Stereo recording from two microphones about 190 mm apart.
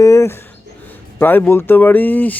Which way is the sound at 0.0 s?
15° left (ahead or behind).